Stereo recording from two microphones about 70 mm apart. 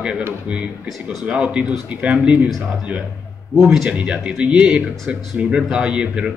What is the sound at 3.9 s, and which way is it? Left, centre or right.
A man's voice, centre.